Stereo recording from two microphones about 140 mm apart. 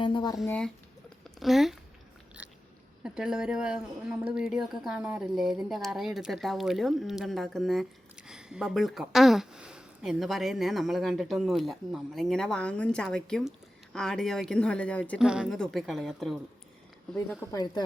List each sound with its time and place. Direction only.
0.0 s speech: 35° left (ahead or behind)
1.4 s speech: centre (ahead or behind)
2.4 s biting: 10° right (ahead or behind)
3.0 s speech: 5° right (ahead or behind)
15.2 s speech: 5° right (ahead or behind)
17.5 s speech: 25° left (ahead or behind)